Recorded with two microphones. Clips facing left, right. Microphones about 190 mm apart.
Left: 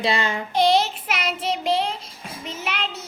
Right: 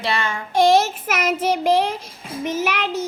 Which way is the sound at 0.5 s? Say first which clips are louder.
Right 4 dB; 45° right (ahead or behind).